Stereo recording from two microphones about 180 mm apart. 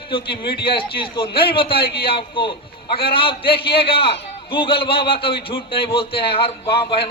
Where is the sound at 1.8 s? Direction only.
60° left (ahead or behind).